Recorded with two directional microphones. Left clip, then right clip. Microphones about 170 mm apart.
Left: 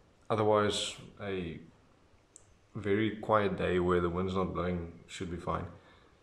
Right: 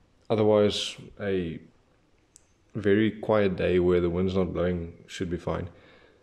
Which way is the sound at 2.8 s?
35° right (ahead or behind).